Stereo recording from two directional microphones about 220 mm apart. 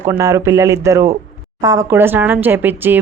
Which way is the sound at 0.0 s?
15° right (ahead or behind).